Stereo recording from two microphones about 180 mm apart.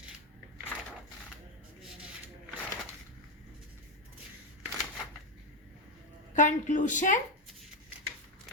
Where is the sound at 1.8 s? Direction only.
5° right (ahead or behind).